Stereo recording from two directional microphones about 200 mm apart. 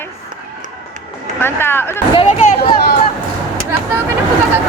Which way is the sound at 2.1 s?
30° left (ahead or behind).